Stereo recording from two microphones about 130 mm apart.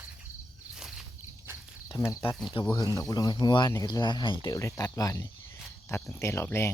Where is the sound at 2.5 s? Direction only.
35° left (ahead or behind).